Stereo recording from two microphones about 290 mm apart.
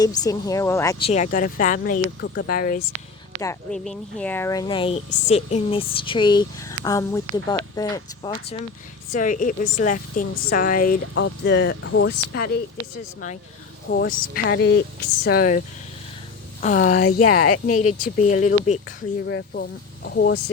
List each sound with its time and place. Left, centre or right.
0.0 s speech: centre; by 2.8 s left
3.4 s speech: centre
9.1 s speech: left
13.9 s speech: left
17.1 s speech: left
17.7 s speech: left
19.3 s speech: left